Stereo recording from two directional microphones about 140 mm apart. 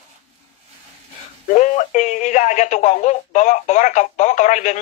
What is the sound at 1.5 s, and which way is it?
Speech, 60° left (ahead or behind).